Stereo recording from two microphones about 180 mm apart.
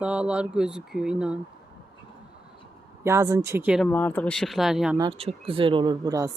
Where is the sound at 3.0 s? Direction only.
15° right (ahead or behind).